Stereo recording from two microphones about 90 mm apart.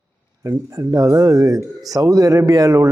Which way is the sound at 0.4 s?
40° right (ahead or behind).